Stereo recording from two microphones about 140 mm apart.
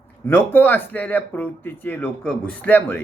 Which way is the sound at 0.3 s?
15° left (ahead or behind).